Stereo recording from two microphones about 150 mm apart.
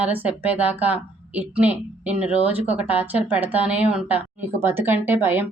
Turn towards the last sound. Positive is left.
turn(degrees=-15)  # may be behind; listen again after turning